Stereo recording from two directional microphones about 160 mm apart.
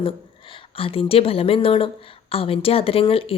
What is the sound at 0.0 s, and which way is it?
A woman's voice, 35° left (ahead or behind).